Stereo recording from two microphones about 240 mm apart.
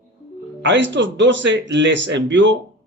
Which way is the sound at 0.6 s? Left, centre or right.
Right.